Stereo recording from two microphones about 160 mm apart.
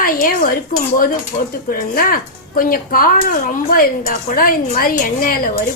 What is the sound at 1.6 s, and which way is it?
Speech, 65° left (ahead or behind).